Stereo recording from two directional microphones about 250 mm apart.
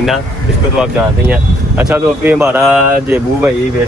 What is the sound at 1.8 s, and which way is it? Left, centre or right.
Speech, centre.